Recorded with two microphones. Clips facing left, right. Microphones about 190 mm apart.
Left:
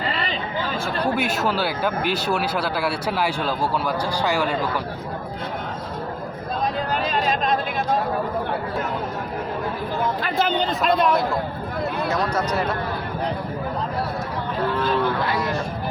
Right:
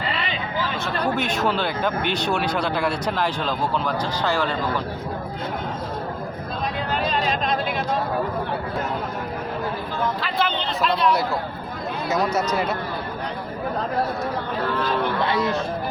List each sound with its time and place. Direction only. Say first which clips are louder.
0.1 s a sound: left 1 dB; 40° left (ahead or behind)
1.1 s speech: even; 5° left (ahead or behind)
6.9 s a sound: left 1 dB; 45° left (ahead or behind)
10.2 s speech: left 3 dB; 45° left (ahead or behind)
12.1 s speech: right 4 dB; 10° right (ahead or behind)
15.0 s speech: right 1 dB; 20° right (ahead or behind)